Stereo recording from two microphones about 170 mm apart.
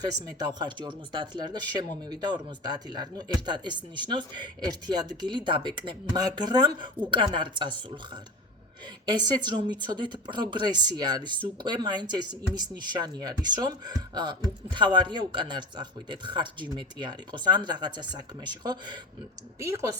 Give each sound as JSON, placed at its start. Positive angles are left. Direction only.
{"t": 0.3, "sound": "a woman's voice", "side_deg": -25}